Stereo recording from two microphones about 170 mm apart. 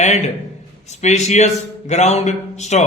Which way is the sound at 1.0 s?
40° left (ahead or behind).